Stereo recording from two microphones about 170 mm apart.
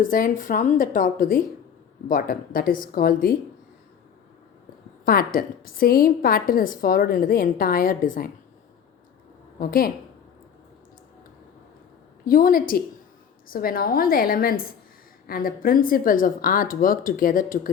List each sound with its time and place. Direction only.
0.0 s a woman's voice: 55° left (ahead or behind)
5.0 s a woman's voice: 60° left (ahead or behind)
9.6 s a woman's voice: 60° left (ahead or behind)
12.2 s a woman's voice: 55° left (ahead or behind)